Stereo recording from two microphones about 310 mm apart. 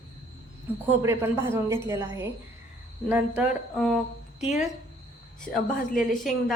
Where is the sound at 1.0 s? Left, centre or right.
Centre.